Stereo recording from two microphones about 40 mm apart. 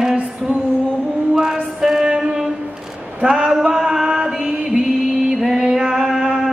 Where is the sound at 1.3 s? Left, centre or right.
Centre.